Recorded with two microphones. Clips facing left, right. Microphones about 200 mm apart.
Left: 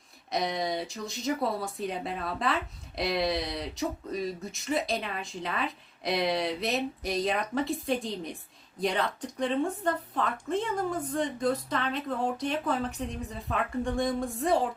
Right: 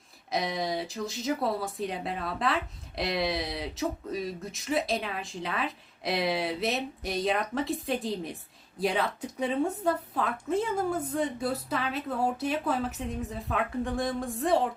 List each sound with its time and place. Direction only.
0.3 s speech: centre (ahead or behind)